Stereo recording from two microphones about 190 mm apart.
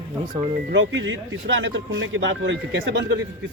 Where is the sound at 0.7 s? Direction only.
85° right.